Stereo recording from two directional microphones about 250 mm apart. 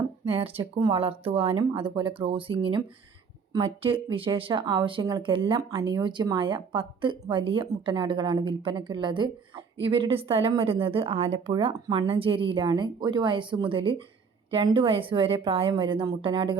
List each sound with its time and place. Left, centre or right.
0.3 s a woman's voice: right